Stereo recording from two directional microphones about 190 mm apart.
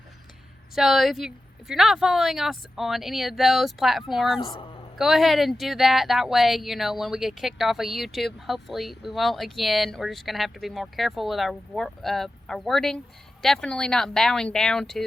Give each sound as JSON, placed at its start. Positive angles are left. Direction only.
{"t": 0.8, "sound": "speech", "side_deg": 0}
{"t": 4.4, "sound": "a woman's voice", "side_deg": 30}
{"t": 4.9, "sound": "speech", "side_deg": 0}